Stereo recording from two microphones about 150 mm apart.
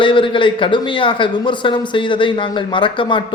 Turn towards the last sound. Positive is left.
turn(degrees=35)  # may be behind; listen again after turning